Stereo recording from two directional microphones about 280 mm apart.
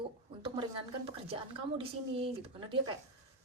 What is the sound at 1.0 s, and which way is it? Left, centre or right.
Speech, centre.